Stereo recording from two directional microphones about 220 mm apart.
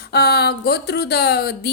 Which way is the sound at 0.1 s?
45° left (ahead or behind).